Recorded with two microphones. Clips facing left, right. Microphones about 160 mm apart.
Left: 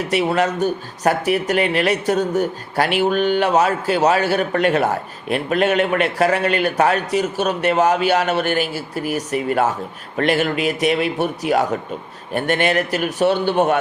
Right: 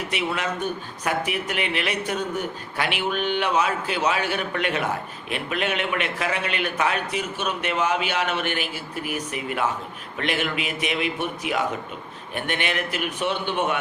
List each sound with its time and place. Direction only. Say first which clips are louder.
0.3 s speech: left 8 dB; 40° left (ahead or behind)